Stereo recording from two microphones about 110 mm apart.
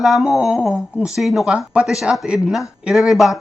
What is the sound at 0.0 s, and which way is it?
Speech, centre (ahead or behind).